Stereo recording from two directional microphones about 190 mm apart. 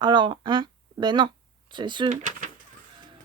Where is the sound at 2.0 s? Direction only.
40° right (ahead or behind).